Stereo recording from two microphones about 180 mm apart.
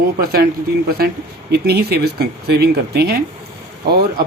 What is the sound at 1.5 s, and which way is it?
Speech, 65° right (ahead or behind).